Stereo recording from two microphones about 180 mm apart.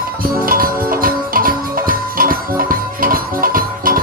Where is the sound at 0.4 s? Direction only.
50° right (ahead or behind).